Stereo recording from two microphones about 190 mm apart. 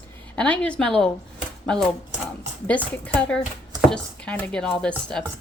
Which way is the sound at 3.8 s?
5° left (ahead or behind).